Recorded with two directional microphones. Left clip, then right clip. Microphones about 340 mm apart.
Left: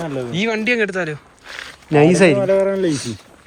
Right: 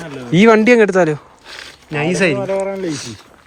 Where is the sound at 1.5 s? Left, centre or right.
Centre.